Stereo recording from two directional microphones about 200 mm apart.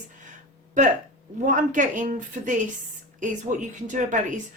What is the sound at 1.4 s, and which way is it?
A woman's voice, 40° right (ahead or behind).